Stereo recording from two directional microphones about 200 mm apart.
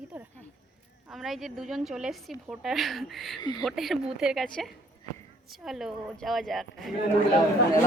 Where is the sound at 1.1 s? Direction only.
Centre (ahead or behind).